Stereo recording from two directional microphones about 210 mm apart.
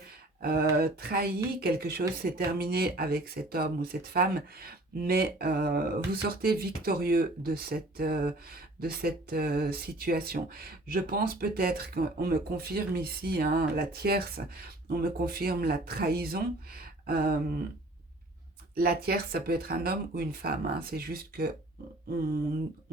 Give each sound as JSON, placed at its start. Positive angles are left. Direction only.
{"t": 0.4, "sound": "speech", "side_deg": -45}
{"t": 18.7, "sound": "speech", "side_deg": -45}